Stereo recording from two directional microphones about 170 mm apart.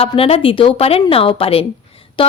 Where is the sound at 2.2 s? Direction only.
30° left (ahead or behind).